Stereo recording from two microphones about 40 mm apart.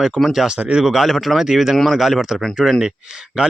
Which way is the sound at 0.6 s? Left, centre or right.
Right.